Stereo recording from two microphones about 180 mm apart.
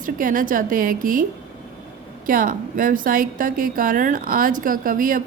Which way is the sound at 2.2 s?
50° right (ahead or behind).